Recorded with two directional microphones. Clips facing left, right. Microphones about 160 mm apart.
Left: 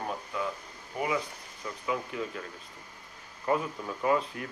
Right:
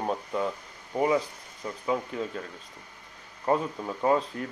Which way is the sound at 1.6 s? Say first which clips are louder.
Right 4 dB; 30° right (ahead or behind).